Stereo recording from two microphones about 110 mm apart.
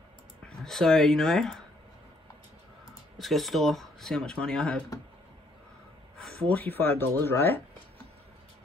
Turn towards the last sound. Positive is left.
turn(degrees=20)  # may be behind; listen again after turning